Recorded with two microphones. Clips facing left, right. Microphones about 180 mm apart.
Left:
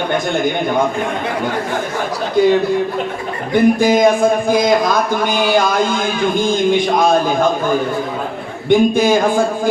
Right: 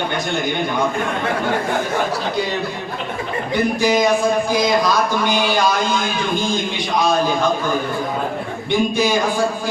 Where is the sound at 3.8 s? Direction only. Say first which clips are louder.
Left 4 dB; 50° left (ahead or behind).